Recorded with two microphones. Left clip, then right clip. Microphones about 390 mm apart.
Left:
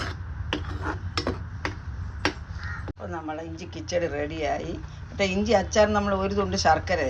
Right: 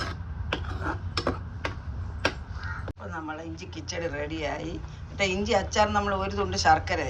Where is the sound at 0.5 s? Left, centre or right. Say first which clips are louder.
Left 1 dB; centre.